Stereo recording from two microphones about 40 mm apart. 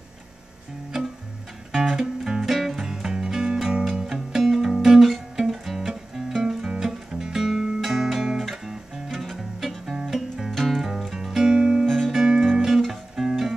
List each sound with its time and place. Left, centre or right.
1.7 s music: centre
5.0 s music: centre
7.3 s guitar: centre
9.2 s music: centre
10.8 s music: centre
11.8 s music: centre
12.1 s music: centre